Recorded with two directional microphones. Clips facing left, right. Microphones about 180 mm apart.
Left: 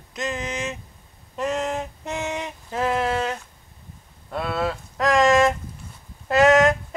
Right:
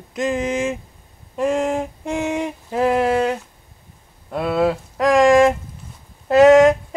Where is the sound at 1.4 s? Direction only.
10° right (ahead or behind).